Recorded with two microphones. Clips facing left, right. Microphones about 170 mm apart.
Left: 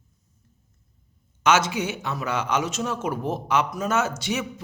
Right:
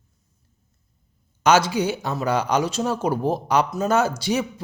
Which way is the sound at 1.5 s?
35° right (ahead or behind).